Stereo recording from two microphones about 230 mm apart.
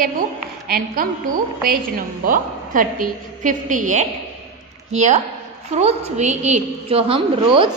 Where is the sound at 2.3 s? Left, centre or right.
Right.